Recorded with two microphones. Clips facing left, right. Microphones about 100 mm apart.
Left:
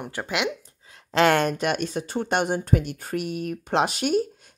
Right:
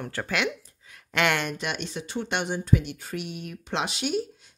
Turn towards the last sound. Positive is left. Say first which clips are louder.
# left 6 dB
turn(degrees=50)  # may be behind; listen again after turning